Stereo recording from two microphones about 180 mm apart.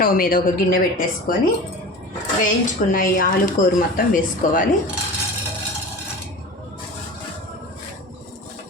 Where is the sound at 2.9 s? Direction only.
50° left (ahead or behind).